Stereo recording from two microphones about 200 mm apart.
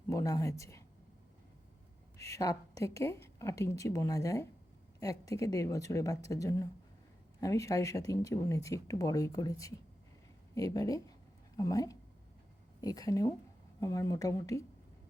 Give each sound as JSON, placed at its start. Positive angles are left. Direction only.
{"t": 0.1, "sound": "speech", "side_deg": 15}
{"t": 2.1, "sound": "speech", "side_deg": 15}